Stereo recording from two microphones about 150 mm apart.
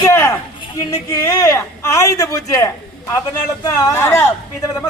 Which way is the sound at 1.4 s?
20° left (ahead or behind).